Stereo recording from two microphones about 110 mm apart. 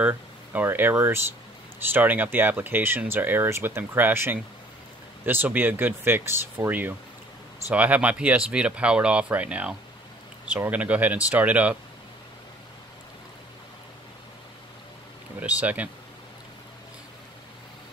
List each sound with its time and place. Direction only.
0.0 s speech: 15° right (ahead or behind)
15.4 s speech: 15° right (ahead or behind)